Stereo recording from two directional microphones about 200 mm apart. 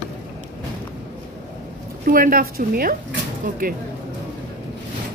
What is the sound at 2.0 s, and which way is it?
A woman's voice, 45° right (ahead or behind).